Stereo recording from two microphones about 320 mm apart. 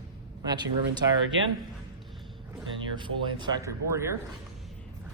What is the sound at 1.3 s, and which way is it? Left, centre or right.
Speech, right.